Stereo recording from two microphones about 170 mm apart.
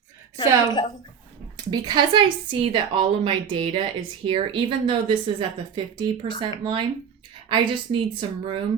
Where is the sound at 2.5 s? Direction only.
30° right (ahead or behind).